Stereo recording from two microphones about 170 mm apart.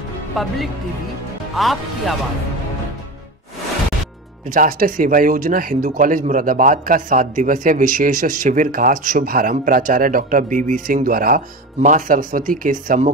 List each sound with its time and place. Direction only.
0.4 s speech: centre (ahead or behind)
4.6 s speech: 55° right (ahead or behind)